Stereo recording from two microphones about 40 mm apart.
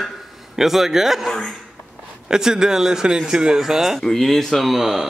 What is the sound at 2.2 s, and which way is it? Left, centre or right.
Speech, centre.